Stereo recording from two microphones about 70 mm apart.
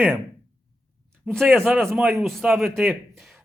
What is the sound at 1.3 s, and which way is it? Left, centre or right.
Speech, centre.